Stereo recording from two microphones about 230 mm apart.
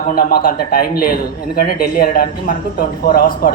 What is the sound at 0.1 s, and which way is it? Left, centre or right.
A man's voice, left.